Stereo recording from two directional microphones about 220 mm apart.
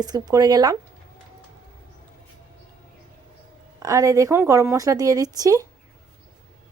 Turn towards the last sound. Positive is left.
turn(degrees=-15)  # may be behind; listen again after turning